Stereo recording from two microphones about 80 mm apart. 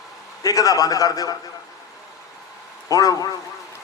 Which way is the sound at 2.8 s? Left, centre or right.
Left.